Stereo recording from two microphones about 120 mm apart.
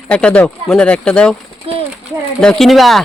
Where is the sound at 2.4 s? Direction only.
5° left (ahead or behind).